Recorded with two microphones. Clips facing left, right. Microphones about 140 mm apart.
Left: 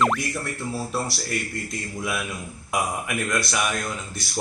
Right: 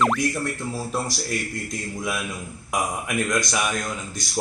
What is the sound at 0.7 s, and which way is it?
Speech, 15° right (ahead or behind).